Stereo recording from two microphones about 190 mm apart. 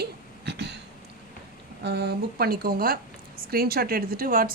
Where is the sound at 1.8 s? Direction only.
60° right (ahead or behind).